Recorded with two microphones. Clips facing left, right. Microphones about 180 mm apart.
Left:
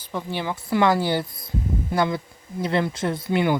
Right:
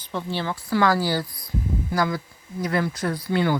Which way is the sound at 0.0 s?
10° left (ahead or behind).